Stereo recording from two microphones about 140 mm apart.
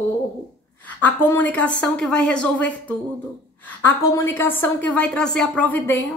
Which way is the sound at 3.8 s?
15° left (ahead or behind).